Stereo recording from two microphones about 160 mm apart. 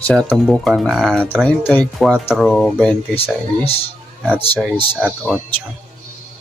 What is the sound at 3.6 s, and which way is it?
Speech, 35° left (ahead or behind).